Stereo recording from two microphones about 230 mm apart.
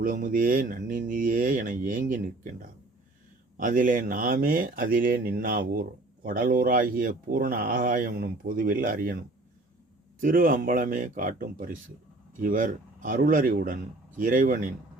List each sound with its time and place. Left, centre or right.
0.0 s speech: right